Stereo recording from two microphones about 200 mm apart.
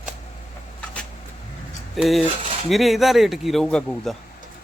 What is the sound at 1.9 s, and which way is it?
Speech, centre (ahead or behind).